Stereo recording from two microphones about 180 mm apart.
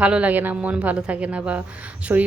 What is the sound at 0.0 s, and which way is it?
A woman's voice, 5° right (ahead or behind).